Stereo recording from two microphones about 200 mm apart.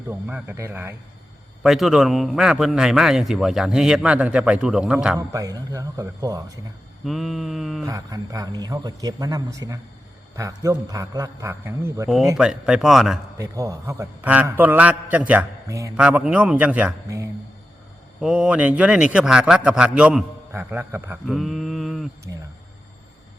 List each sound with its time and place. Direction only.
0.1 s a man's voice: 10° right (ahead or behind)
5.3 s a man's voice: 15° right (ahead or behind)
7.0 s a man's voice: centre (ahead or behind)
7.9 s a man's voice: 15° right (ahead or behind); by 13.1 s centre (ahead or behind)
13.4 s a man's voice: 15° right (ahead or behind); by 22.1 s centre (ahead or behind)